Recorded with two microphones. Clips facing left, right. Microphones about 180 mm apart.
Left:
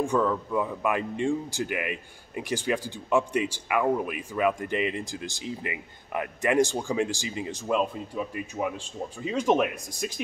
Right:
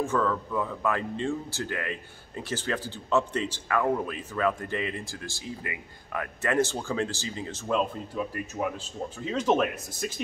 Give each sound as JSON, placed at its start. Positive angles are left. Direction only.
{"t": 0.0, "sound": "speech", "side_deg": 15}